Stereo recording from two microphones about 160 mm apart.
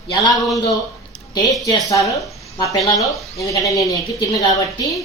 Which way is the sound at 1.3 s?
25° left (ahead or behind).